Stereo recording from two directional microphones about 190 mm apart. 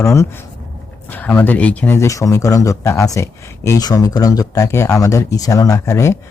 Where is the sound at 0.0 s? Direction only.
15° left (ahead or behind).